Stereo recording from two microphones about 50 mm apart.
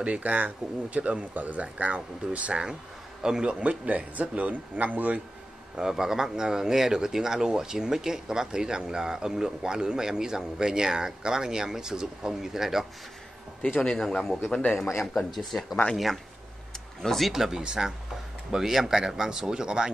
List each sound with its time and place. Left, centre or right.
0.0 s a man's voice: right
3.6 s speech: right
5.8 s speech: centre
13.7 s a man's voice: centre
16.7 s a sound: centre
17.3 s speech: centre